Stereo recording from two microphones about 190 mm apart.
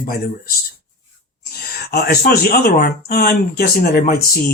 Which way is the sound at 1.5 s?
55° left (ahead or behind).